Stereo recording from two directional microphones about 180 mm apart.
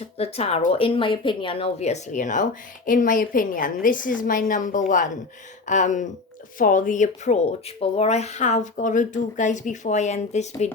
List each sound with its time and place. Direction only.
0.2 s speech: 35° left (ahead or behind)